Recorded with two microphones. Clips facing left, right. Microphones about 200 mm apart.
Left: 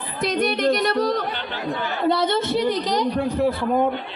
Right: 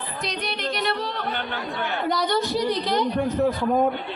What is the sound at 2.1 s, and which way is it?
A woman's voice, 25° left (ahead or behind).